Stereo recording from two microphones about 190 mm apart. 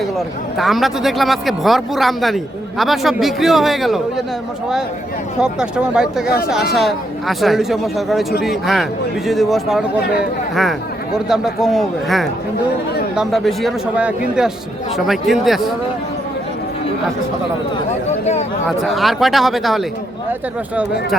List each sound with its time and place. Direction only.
0.5 s a man's voice: centre (ahead or behind)
5.4 s a man's voice: 5° right (ahead or behind)
6.2 s speech: 55° left (ahead or behind)
6.7 s a man's voice: centre (ahead or behind)
10.0 s speech: 55° left (ahead or behind)
10.5 s a man's voice: centre (ahead or behind)
18.8 s a man's voice: centre (ahead or behind)